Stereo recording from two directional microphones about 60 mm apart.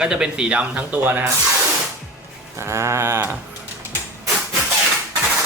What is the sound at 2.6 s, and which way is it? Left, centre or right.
Sheep, right.